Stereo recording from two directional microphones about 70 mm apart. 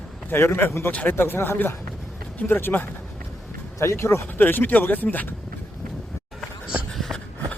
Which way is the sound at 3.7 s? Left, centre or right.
Left.